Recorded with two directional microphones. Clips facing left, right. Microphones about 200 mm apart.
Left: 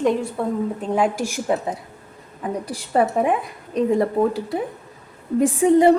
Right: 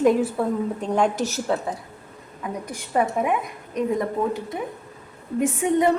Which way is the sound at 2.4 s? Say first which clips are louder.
Left 4 dB; 35° left (ahead or behind).